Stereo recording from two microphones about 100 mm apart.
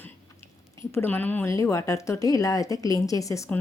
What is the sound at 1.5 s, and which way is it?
A woman's voice, 30° left (ahead or behind).